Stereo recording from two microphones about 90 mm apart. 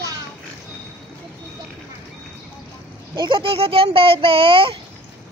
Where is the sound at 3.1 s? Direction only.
70° right (ahead or behind).